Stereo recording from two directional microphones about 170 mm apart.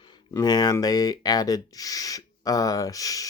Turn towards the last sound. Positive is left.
turn(degrees=20)  # may be behind; listen again after turning